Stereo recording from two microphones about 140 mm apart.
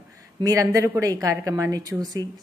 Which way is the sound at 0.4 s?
25° right (ahead or behind).